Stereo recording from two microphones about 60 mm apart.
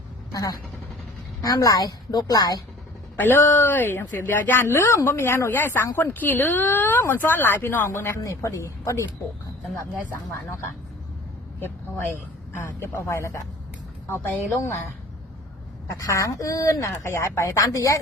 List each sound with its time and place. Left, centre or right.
1.4 s a woman's voice: left
3.2 s speech: left
5.5 s speech: left
8.2 s speech: left
12.8 s speech: left
14.1 s speech: left
16.0 s speech: left
17.1 s speech: left